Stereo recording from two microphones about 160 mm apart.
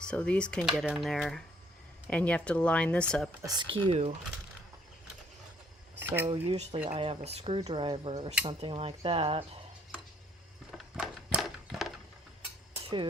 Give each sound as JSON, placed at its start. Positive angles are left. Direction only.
{"t": 0.1, "sound": "speech", "side_deg": 5}
{"t": 3.4, "sound": "speech", "side_deg": -25}
{"t": 6.0, "sound": "a sound", "side_deg": -10}
{"t": 6.2, "sound": "speech", "side_deg": -35}
{"t": 10.7, "sound": "crushing", "side_deg": 0}